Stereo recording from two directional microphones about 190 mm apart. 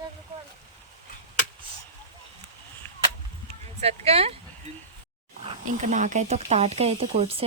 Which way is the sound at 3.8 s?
30° right (ahead or behind).